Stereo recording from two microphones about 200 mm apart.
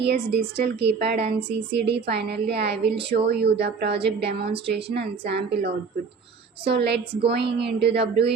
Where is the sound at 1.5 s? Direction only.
55° right (ahead or behind).